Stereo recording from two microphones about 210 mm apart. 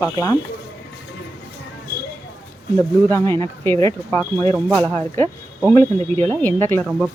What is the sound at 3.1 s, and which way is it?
Speech, 10° left (ahead or behind).